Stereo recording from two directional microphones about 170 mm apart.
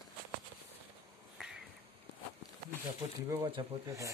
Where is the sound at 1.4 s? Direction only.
Centre (ahead or behind).